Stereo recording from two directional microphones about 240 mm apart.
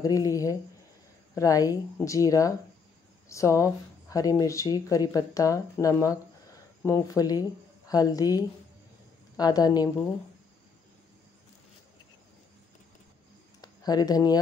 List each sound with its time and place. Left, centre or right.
0.0 s speech: centre
9.4 s speech: centre
13.6 s a sound: centre